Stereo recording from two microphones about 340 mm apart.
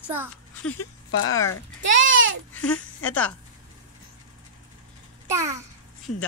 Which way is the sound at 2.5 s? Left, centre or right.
Centre.